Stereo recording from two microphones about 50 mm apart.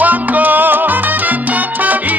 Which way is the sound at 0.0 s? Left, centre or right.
Right.